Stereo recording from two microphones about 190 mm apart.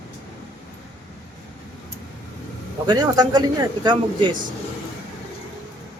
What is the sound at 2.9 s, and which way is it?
Speech, 20° right (ahead or behind).